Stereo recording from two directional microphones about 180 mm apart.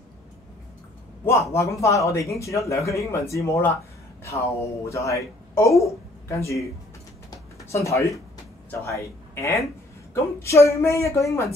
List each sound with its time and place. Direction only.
1.2 s a man's voice: 15° left (ahead or behind)
4.8 s a man's voice: 15° left (ahead or behind)
7.2 s a sound: 15° left (ahead or behind)
8.6 s a man's voice: 15° left (ahead or behind)